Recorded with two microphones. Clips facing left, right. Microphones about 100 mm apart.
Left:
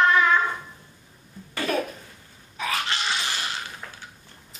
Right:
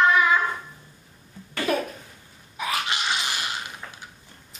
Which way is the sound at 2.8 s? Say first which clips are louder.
Right 1 dB; 15° right (ahead or behind).